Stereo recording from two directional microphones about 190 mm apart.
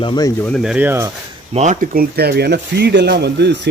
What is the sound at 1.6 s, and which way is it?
Speech, 40° right (ahead or behind).